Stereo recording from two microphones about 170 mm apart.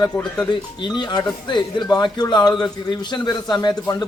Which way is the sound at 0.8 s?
25° left (ahead or behind).